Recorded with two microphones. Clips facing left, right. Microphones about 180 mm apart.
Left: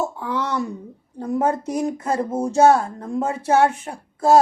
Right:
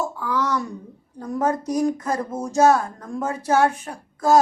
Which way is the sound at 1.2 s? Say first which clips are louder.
Left 2 dB; 25° left (ahead or behind).